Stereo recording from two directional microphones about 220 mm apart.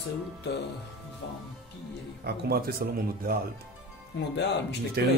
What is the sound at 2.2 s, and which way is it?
Speech, 45° right (ahead or behind).